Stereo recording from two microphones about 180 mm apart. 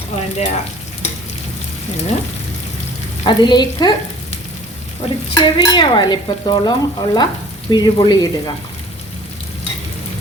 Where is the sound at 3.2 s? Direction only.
25° left (ahead or behind).